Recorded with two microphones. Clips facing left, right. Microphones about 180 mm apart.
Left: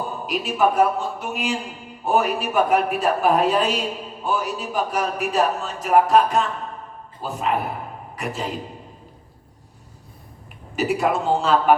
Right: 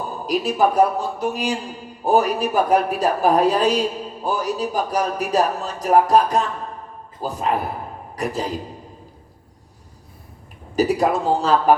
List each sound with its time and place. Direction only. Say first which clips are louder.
0.3 s a man's voice: right 2 dB; 35° right (ahead or behind)
10.8 s speech: right 3 dB; 35° right (ahead or behind)